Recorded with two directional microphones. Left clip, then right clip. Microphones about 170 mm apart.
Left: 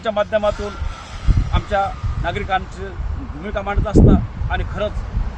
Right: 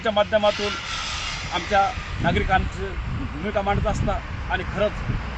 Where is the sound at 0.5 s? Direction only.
60° left (ahead or behind); by 1.4 s 85° left.